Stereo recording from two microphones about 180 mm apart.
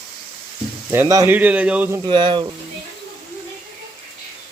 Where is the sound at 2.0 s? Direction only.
25° right (ahead or behind).